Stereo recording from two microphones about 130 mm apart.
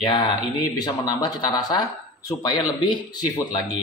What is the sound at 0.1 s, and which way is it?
Speech, 35° left (ahead or behind).